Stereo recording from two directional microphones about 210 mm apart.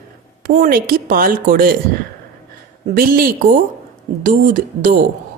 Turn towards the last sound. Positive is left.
turn(degrees=-40)  # may be behind; listen again after turning